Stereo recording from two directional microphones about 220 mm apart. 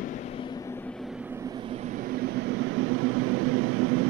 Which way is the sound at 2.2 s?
50° right (ahead or behind).